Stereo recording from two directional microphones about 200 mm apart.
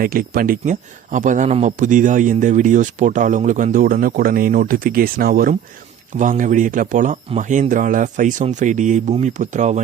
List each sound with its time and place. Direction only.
0.0 s a man's voice: 45° right (ahead or behind)